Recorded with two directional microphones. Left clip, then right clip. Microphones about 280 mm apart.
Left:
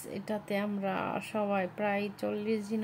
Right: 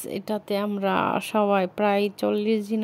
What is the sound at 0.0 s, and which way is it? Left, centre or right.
Speech, right.